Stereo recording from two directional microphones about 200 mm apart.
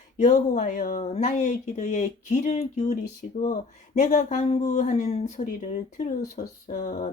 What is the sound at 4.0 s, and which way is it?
Speech, 40° left (ahead or behind).